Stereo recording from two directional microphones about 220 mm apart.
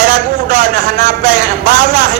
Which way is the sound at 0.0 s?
40° right (ahead or behind).